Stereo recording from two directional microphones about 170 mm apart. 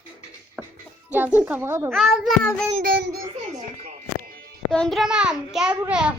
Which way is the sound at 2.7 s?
65° right (ahead or behind).